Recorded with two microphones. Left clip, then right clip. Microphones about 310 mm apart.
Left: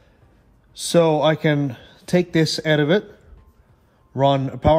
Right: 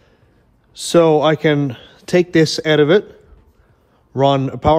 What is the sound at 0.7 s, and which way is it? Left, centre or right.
A man's voice, right.